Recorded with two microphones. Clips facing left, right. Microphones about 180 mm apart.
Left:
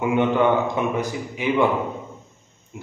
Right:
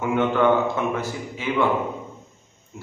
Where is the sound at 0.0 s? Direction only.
15° left (ahead or behind).